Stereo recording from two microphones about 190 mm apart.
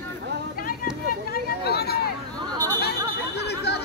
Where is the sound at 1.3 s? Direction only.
55° left (ahead or behind).